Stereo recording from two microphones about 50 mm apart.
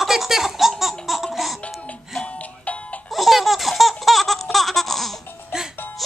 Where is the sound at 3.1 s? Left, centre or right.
Centre.